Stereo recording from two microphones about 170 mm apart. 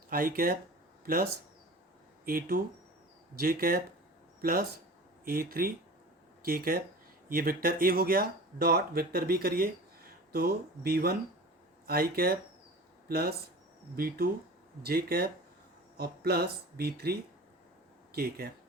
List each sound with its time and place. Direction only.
0.1 s speech: 55° right (ahead or behind)